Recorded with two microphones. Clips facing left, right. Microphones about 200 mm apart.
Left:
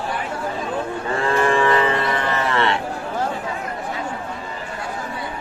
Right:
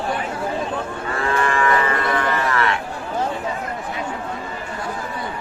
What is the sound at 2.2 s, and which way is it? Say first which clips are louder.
Cattle: even; 25° left (ahead or behind).